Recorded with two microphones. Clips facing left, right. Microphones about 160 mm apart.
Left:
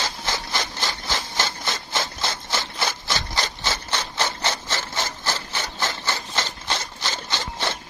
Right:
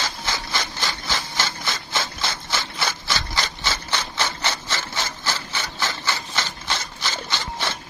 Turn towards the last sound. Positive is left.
turn(degrees=20)  # may be behind; listen again after turning